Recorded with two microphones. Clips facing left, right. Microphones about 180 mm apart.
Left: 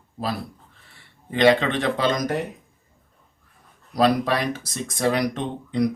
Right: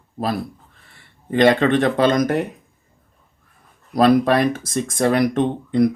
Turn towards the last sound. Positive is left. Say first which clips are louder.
# right 7 dB
turn(degrees=-50)  # may be behind; listen again after turning